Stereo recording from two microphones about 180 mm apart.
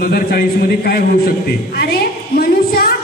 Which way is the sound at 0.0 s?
55° left (ahead or behind).